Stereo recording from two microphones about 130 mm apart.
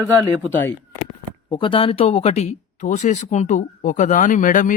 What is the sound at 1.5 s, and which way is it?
Speech, 40° left (ahead or behind).